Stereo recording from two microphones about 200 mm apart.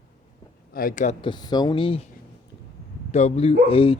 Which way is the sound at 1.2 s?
20° left (ahead or behind).